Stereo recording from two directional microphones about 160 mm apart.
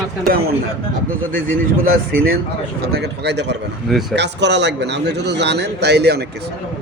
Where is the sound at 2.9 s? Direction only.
90° right.